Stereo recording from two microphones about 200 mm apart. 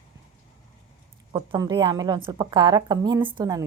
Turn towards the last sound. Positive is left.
turn(degrees=-20)  # may be behind; listen again after turning